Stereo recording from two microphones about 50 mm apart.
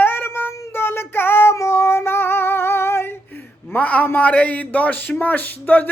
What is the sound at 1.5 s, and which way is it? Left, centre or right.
Female singing, left.